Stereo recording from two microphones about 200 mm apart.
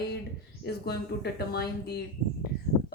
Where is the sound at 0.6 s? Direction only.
55° left (ahead or behind).